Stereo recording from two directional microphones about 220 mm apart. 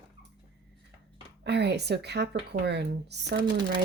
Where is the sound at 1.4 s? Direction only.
50° right (ahead or behind).